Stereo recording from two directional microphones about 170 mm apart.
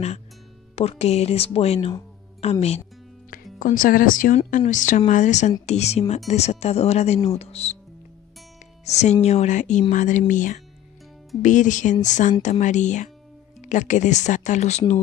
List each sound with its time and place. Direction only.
0.7 s speech: 40° left (ahead or behind)
3.5 s speech: 55° left (ahead or behind)
8.8 s speech: 40° left (ahead or behind)